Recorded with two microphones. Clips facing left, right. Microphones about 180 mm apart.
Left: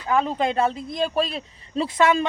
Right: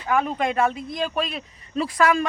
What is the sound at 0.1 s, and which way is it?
Speech, 25° left (ahead or behind).